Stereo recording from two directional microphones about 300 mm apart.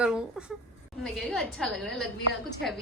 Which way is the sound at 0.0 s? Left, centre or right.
Centre.